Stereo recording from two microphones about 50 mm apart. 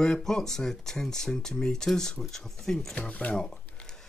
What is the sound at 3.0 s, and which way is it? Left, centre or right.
Speech, left.